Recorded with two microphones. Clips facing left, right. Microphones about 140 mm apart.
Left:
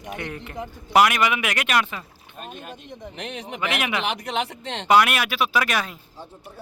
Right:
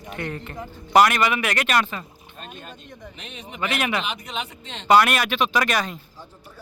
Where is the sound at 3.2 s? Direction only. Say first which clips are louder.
Left 1 dB; 80° left.